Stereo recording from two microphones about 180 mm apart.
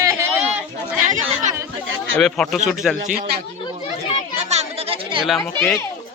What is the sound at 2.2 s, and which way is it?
Speech, centre (ahead or behind).